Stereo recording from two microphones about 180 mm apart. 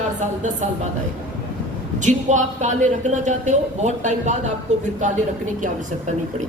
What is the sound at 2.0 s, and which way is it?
A woman's voice, 40° right (ahead or behind).